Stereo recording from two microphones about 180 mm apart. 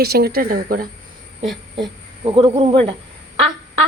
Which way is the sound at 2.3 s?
30° right (ahead or behind).